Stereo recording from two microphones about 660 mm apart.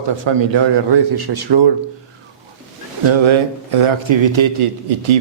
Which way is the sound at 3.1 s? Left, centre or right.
Right.